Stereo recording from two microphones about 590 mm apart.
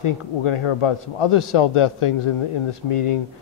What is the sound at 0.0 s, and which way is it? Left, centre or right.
Speech, left.